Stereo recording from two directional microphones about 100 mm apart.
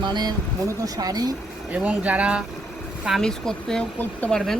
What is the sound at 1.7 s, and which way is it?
Speech, 15° right (ahead or behind).